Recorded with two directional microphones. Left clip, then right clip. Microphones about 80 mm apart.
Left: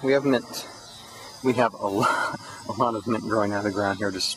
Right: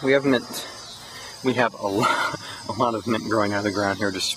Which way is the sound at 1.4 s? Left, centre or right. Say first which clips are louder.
Even; centre.